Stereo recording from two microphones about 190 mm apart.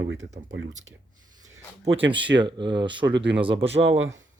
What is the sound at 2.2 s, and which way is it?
Speech, 70° right (ahead or behind).